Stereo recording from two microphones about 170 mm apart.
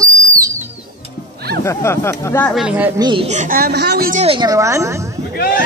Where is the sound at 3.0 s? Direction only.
30° right (ahead or behind).